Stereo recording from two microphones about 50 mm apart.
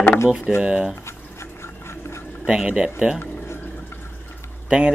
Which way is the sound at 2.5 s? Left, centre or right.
Centre.